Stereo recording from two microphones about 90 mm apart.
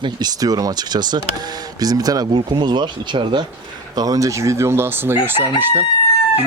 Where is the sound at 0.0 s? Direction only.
50° right (ahead or behind).